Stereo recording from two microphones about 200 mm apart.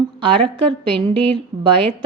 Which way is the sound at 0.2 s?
25° right (ahead or behind).